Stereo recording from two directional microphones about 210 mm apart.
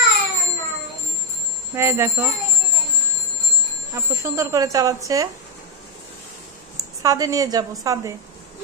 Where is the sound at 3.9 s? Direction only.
15° right (ahead or behind).